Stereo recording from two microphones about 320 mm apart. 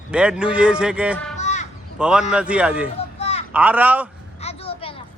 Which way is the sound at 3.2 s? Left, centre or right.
Centre.